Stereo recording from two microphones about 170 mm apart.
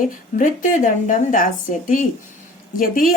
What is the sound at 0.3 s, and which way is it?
A woman's voice, 50° left (ahead or behind).